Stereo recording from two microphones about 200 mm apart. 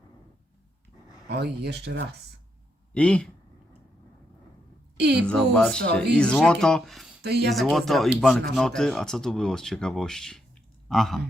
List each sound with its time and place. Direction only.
1.3 s speech: 55° right (ahead or behind)
2.9 s speech: 5° left (ahead or behind)
4.9 s a woman's voice: 55° right (ahead or behind)
5.2 s speech: 5° left (ahead or behind)
7.2 s speech: 55° right (ahead or behind)
7.5 s speech: centre (ahead or behind)
10.8 s a sound: centre (ahead or behind)